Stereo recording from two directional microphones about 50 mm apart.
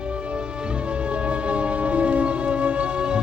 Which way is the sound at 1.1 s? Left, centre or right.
Right.